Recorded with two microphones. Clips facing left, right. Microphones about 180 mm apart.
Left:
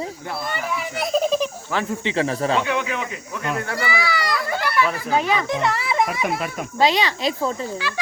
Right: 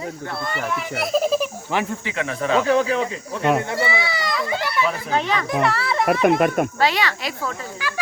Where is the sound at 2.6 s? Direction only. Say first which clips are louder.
Right 6 dB; 35° right (ahead or behind).